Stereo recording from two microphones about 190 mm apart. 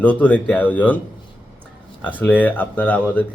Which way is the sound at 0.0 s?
10° left (ahead or behind).